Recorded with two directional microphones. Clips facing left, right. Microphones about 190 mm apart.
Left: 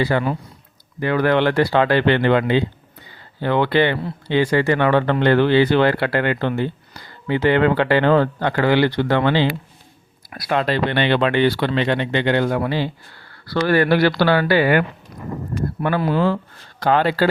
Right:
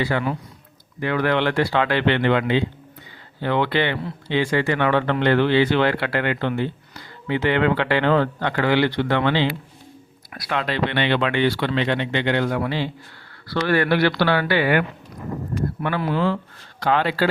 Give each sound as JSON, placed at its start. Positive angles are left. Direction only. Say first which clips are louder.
{"t": 0.0, "sound": "speech", "louder": "left 3 dB", "side_deg": 35}
{"t": 10.5, "sound": "speech", "louder": "left 4 dB", "side_deg": 40}